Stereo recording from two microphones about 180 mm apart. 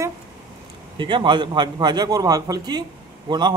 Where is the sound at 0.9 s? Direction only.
25° right (ahead or behind).